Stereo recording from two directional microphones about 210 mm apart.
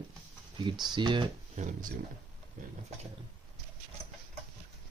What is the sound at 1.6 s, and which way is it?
Speech, 40° right (ahead or behind).